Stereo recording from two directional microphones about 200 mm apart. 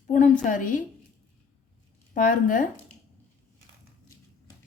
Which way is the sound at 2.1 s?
40° left (ahead or behind).